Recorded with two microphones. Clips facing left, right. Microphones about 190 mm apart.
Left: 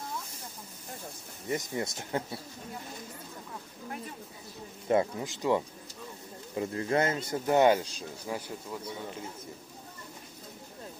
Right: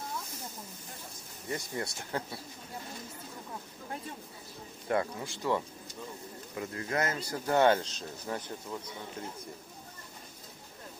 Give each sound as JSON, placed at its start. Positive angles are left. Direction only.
{"t": 1.5, "sound": "speech", "side_deg": 20}
{"t": 4.8, "sound": "speech", "side_deg": 20}